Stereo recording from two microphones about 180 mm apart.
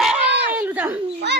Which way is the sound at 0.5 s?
10° right (ahead or behind).